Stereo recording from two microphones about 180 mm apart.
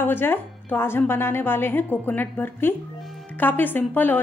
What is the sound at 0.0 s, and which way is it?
Speech, 10° left (ahead or behind).